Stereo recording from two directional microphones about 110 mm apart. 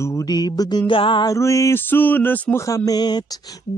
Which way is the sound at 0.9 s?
50° left (ahead or behind).